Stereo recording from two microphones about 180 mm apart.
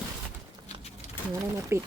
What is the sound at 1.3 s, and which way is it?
Speech, 15° right (ahead or behind).